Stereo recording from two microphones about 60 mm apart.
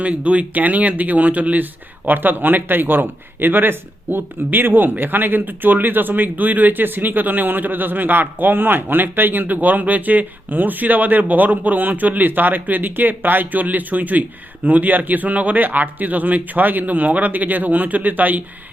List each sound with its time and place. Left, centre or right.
0.0 s a man's voice: right